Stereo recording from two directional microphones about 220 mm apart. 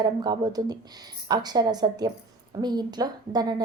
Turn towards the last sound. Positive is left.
turn(degrees=-20)  # may be behind; listen again after turning